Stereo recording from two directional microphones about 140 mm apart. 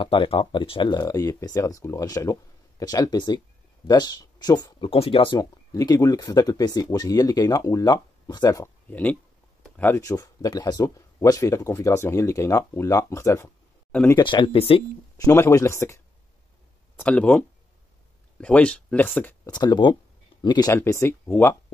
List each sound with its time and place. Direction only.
0.0 s speech: 40° left (ahead or behind)
8.9 s speech: 10° left (ahead or behind)
10.0 s speech: 25° left (ahead or behind)
14.1 s speech: 35° left (ahead or behind)
15.1 s speech: 20° left (ahead or behind)
17.0 s speech: 10° left (ahead or behind)
19.4 s speech: 30° left (ahead or behind)
20.7 s speech: 15° left (ahead or behind)